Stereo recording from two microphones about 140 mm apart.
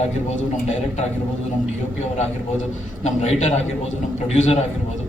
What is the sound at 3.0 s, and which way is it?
A man's voice, 50° left (ahead or behind).